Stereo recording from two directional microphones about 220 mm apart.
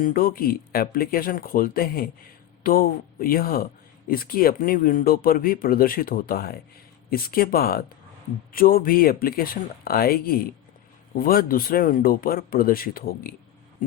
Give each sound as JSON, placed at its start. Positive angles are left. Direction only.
{"t": 0.0, "sound": "speech", "side_deg": 40}